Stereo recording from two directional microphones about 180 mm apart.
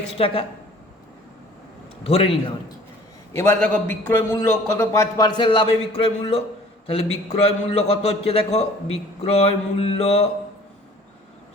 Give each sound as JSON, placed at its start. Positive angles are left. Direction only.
{"t": 0.1, "sound": "a man's voice", "side_deg": 30}
{"t": 2.0, "sound": "a man's voice", "side_deg": 35}
{"t": 3.3, "sound": "a man's voice", "side_deg": 10}